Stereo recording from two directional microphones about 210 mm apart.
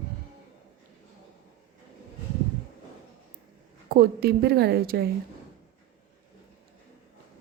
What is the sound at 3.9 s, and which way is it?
A woman's voice, 45° right (ahead or behind).